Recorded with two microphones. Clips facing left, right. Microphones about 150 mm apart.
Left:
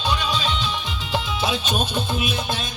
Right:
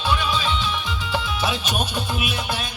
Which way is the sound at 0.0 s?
20° left (ahead or behind).